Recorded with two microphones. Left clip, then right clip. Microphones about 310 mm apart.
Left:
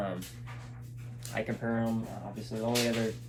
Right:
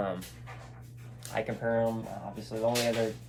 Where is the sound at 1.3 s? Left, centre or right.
Centre.